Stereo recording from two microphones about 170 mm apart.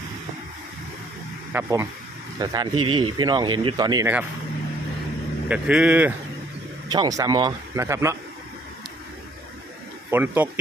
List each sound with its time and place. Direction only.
1.5 s speech: 15° right (ahead or behind)
5.5 s speech: 5° right (ahead or behind)
6.8 s speech: 25° right (ahead or behind)
10.1 s speech: 10° right (ahead or behind)